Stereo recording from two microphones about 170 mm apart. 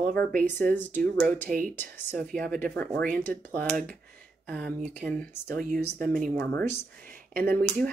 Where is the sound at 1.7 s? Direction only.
10° left (ahead or behind).